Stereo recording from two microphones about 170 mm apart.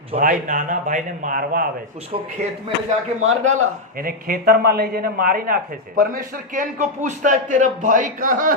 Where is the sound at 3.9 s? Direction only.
60° right (ahead or behind).